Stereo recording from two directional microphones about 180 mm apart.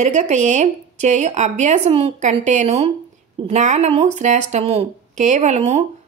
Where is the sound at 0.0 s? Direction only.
40° right (ahead or behind).